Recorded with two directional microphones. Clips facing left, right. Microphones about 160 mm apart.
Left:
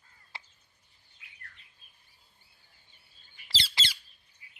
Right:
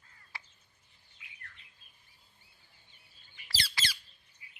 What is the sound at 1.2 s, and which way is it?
Bird, 45° left (ahead or behind).